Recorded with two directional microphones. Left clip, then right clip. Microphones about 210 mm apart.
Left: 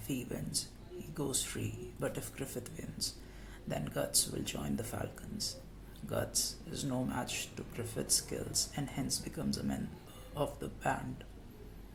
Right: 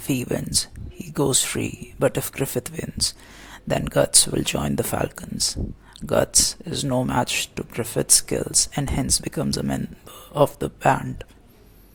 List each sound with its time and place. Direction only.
0.1 s speech: 45° right (ahead or behind)